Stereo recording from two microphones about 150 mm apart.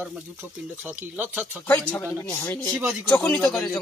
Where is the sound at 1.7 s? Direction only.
15° left (ahead or behind).